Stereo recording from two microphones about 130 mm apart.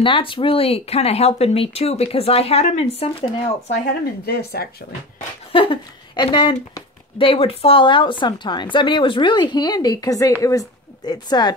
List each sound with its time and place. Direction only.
0.0 s speech: 40° left (ahead or behind)
5.5 s speech: 40° left (ahead or behind)